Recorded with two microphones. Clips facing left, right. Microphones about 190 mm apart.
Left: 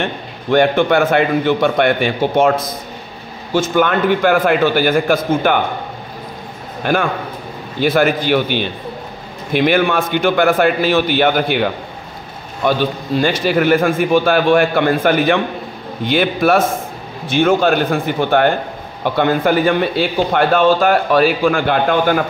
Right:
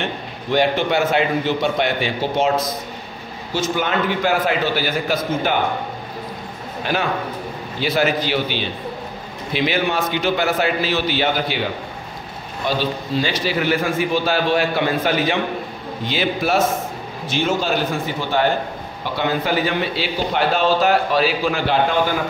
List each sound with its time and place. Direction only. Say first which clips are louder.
0.0 s a man's voice: left 4 dB; 55° left (ahead or behind)
6.8 s a man's voice: left 4 dB; 50° left (ahead or behind)